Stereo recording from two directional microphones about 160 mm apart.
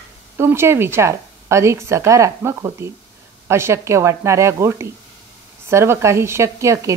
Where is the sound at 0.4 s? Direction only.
15° right (ahead or behind).